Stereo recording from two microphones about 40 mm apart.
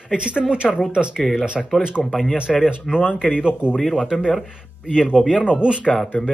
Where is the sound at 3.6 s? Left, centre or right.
Right.